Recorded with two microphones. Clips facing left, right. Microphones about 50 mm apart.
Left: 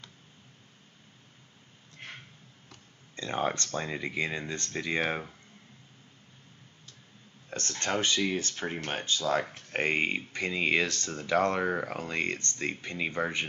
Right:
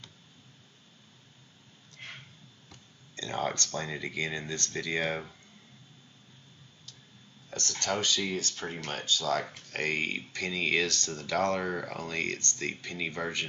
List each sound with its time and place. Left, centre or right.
3.2 s speech: left
7.4 s speech: left